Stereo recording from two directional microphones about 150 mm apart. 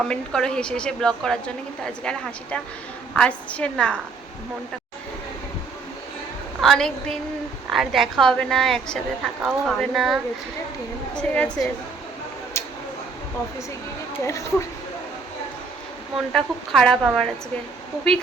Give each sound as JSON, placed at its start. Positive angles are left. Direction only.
{"t": 0.0, "sound": "a woman's voice", "side_deg": 5}
{"t": 6.6, "sound": "a woman's voice", "side_deg": 0}
{"t": 12.6, "sound": "a sound", "side_deg": 15}
{"t": 14.2, "sound": "speech", "side_deg": 20}
{"t": 16.3, "sound": "a woman's voice", "side_deg": 5}